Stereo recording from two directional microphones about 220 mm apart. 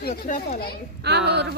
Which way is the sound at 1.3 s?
50° right (ahead or behind).